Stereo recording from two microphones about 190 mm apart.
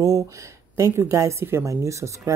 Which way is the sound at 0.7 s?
15° right (ahead or behind).